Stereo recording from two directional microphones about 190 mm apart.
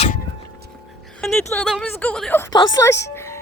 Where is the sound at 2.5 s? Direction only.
20° left (ahead or behind).